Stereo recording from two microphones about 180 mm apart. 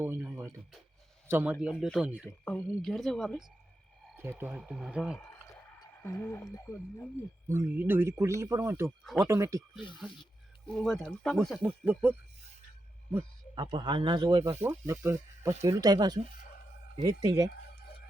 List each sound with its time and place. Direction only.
0.0 s speech: 15° right (ahead or behind)
4.2 s speech: 10° right (ahead or behind)
6.1 s speech: 10° left (ahead or behind)
7.4 s speech: 15° right (ahead or behind)
10.8 s speech: centre (ahead or behind)
11.6 s speech: 10° right (ahead or behind)
13.1 s speech: 25° right (ahead or behind)